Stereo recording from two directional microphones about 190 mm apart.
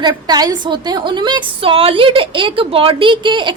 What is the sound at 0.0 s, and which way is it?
A woman's voice, 20° right (ahead or behind).